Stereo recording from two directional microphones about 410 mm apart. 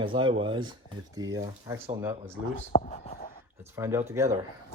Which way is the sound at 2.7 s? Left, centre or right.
Centre.